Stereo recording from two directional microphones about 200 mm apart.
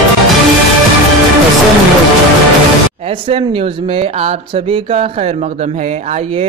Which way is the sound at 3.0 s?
30° right (ahead or behind).